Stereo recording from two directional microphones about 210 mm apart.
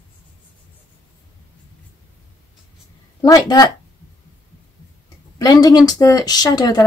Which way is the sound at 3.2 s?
20° left (ahead or behind).